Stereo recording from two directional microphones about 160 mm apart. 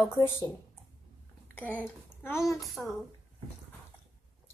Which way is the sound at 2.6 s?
Centre (ahead or behind).